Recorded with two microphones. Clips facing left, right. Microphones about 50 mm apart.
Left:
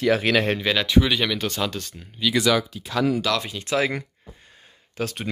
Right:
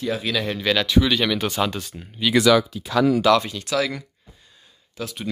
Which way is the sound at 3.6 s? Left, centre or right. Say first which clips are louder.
Left 5 dB; left.